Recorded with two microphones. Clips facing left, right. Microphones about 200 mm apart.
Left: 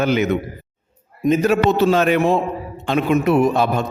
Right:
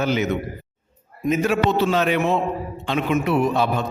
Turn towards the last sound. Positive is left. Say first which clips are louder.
# left 4 dB
turn(degrees=45)  # may be behind; listen again after turning